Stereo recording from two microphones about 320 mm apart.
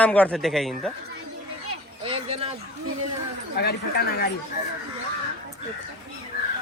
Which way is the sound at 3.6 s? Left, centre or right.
Left.